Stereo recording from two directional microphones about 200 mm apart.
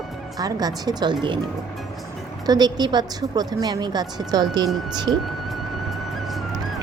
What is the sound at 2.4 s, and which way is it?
A woman's voice, 20° right (ahead or behind).